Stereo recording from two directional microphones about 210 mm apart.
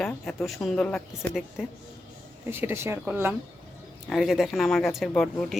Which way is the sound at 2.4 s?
10° right (ahead or behind).